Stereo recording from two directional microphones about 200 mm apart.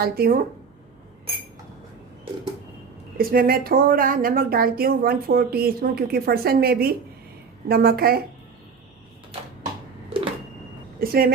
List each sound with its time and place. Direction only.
0.0 s speech: 50° right (ahead or behind)
3.2 s speech: 45° right (ahead or behind)
11.0 s speech: 50° right (ahead or behind)